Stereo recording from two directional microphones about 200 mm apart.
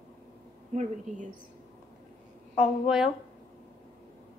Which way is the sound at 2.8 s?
Centre (ahead or behind).